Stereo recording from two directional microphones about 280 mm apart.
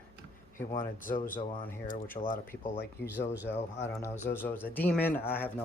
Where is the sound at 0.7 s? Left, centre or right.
Left.